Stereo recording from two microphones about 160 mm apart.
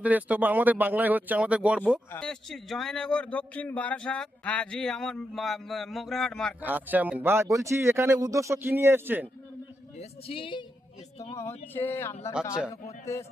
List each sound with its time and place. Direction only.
0.0 s speech: 10° right (ahead or behind)
6.6 s speech: 10° right (ahead or behind)
10.0 s speech: 35° left (ahead or behind)
11.3 s speech: 15° left (ahead or behind)